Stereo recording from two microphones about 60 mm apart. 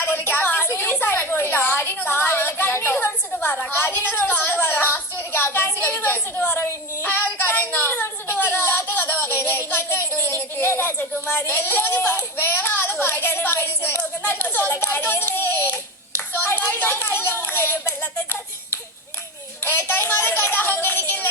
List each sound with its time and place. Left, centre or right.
0.0 s a sound: left
7.0 s child singing: left
9.2 s a child's voice: left
19.6 s speech: left